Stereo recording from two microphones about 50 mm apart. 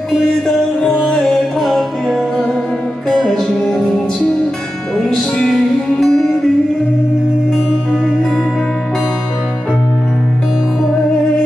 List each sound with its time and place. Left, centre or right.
0.8 s music: centre
1.6 s music: centre
5.5 s music: centre